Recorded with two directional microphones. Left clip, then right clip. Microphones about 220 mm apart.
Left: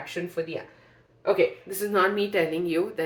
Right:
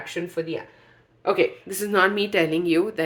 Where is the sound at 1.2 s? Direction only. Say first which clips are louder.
Right 1 dB; 55° right (ahead or behind).